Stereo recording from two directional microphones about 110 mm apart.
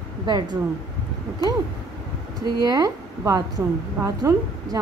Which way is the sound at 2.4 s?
35° right (ahead or behind).